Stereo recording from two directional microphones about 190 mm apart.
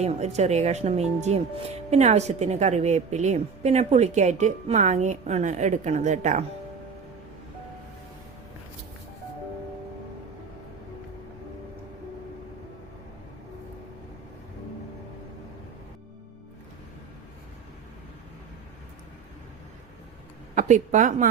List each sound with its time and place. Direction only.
0.0 s a woman's voice: 35° right (ahead or behind)
20.6 s a woman's voice: 40° right (ahead or behind)